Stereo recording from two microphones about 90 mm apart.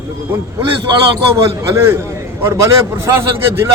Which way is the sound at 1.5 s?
30° right (ahead or behind).